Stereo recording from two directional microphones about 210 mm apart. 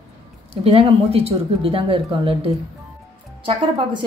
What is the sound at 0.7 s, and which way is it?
A woman's voice, 30° right (ahead or behind).